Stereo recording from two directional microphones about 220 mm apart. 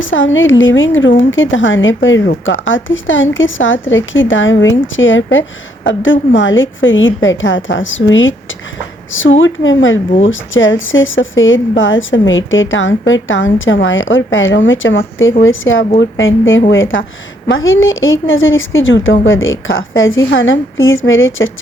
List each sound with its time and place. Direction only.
0.0 s speech: 60° left (ahead or behind)